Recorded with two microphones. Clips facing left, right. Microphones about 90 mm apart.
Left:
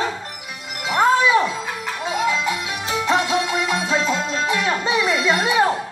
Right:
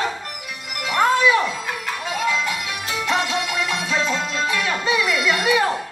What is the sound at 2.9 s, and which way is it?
Music, 25° left (ahead or behind).